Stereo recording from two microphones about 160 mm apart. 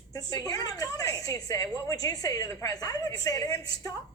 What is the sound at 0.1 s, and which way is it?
A woman's voice, 25° left (ahead or behind).